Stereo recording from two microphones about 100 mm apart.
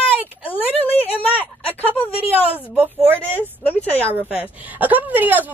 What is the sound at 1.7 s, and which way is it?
Speech, 20° left (ahead or behind).